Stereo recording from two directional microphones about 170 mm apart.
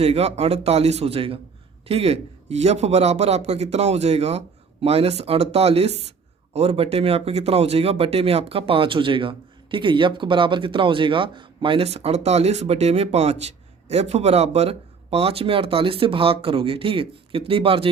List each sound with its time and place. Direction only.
0.0 s speech: 35° right (ahead or behind)